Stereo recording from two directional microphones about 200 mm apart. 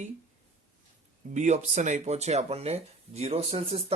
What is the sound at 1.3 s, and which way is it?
Speech, 35° right (ahead or behind).